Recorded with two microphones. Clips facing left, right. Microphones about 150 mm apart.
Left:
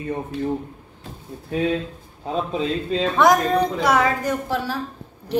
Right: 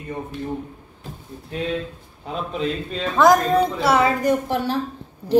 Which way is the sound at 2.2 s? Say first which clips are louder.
Left 2 dB; 35° left (ahead or behind).